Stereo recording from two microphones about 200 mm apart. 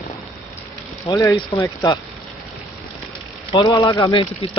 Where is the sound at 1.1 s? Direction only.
15° left (ahead or behind).